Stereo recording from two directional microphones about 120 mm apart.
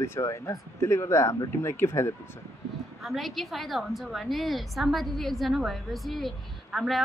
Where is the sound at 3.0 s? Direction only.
Centre (ahead or behind).